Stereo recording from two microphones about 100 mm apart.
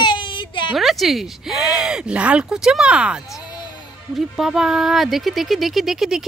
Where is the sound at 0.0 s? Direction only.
50° left (ahead or behind).